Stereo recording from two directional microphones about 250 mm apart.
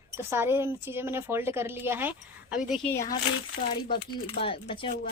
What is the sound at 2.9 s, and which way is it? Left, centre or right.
Speech, centre.